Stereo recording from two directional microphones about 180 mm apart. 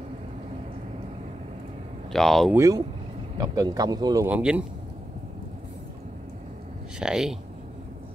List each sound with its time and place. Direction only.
2.1 s speech: centre (ahead or behind)
2.5 s speech: 20° right (ahead or behind)
4.4 s speech: 5° right (ahead or behind)
7.0 s speech: 5° right (ahead or behind)